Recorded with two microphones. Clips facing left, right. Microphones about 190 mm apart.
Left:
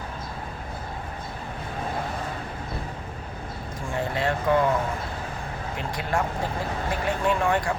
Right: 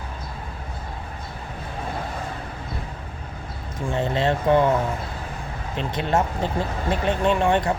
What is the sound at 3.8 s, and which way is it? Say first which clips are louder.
Speech: right 4 dB; 20° right (ahead or behind).